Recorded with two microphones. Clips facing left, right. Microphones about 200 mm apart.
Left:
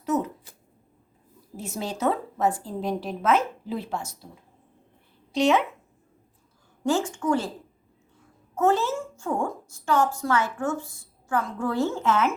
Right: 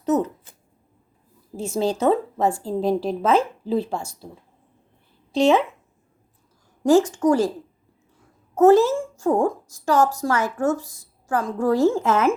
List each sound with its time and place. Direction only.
0.0 s speech: 30° right (ahead or behind)
1.5 s a woman's voice: 30° right (ahead or behind)
5.3 s a woman's voice: 30° right (ahead or behind)
6.8 s a woman's voice: 40° right (ahead or behind)
8.5 s a woman's voice: 40° right (ahead or behind)